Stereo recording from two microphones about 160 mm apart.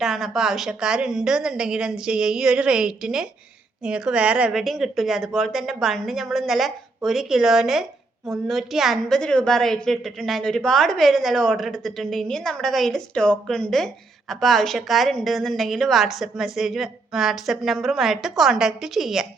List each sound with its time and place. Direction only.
0.0 s a woman's voice: centre (ahead or behind)